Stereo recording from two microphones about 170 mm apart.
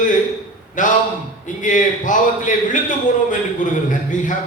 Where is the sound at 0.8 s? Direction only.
50° left (ahead or behind).